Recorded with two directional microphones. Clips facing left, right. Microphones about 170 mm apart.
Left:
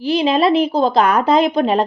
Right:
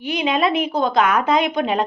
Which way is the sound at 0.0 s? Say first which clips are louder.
Left 5 dB; 30° left (ahead or behind).